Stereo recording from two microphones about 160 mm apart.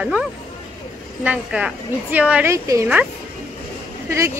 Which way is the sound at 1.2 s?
5° right (ahead or behind).